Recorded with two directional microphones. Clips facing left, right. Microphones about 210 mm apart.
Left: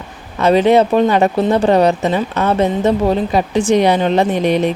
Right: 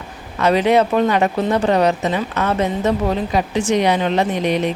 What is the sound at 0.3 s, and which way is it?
Speech, 25° left (ahead or behind).